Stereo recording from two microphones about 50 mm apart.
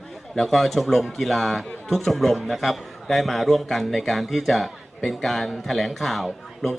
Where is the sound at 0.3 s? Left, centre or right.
Centre.